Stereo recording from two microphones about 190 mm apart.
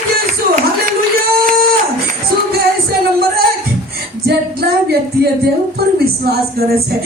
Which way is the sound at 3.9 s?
55° right (ahead or behind).